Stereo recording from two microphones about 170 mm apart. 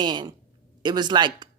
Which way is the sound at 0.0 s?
25° right (ahead or behind).